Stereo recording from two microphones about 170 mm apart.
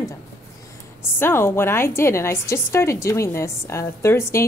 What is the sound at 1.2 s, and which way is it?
A woman's voice, 15° left (ahead or behind).